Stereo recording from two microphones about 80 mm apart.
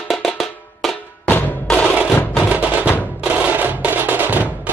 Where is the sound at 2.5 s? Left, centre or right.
Centre.